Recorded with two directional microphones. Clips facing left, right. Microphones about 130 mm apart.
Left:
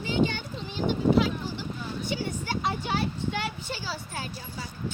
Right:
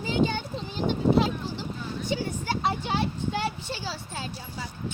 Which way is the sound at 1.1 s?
30° right (ahead or behind).